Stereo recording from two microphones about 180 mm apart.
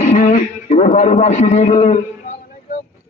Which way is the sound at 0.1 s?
40° left (ahead or behind).